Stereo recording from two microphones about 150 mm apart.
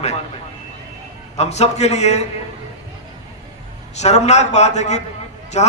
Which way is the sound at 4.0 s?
50° left (ahead or behind).